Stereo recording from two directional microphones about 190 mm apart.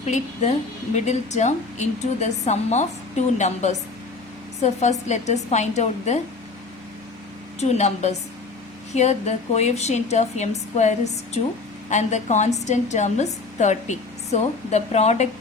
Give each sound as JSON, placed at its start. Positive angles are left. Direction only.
{"t": 0.0, "sound": "a woman's voice", "side_deg": 35}
{"t": 7.6, "sound": "a woman's voice", "side_deg": 35}